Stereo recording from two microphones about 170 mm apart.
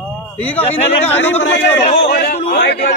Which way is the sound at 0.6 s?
40° left (ahead or behind).